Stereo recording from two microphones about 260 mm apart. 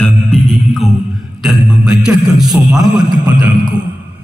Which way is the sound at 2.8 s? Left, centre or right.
Centre.